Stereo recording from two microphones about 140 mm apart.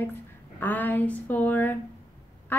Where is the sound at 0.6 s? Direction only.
15° left (ahead or behind).